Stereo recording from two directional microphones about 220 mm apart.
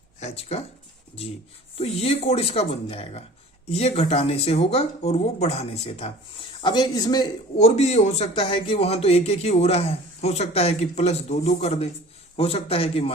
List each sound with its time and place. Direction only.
0.2 s speech: 30° left (ahead or behind)
1.7 s speech: 25° left (ahead or behind)
7.6 s speech: 30° left (ahead or behind)